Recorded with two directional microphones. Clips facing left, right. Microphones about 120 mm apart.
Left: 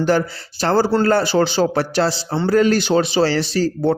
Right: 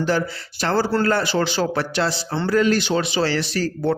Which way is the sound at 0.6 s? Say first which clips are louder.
Left 4 dB; 35° left (ahead or behind).